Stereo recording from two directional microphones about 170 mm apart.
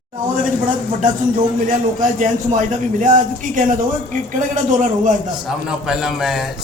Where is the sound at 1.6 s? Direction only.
50° right (ahead or behind).